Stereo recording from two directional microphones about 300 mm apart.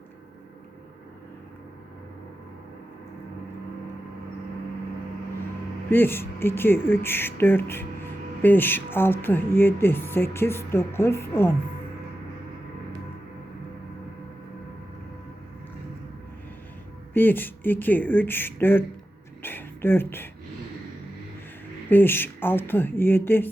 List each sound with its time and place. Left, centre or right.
5.9 s speech: centre
17.2 s speech: centre
19.4 s a sound: centre
21.8 s speech: centre